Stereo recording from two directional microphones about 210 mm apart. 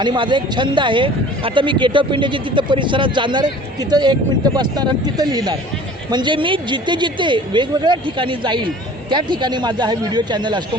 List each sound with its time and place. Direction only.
0.0 s speech: 20° right (ahead or behind)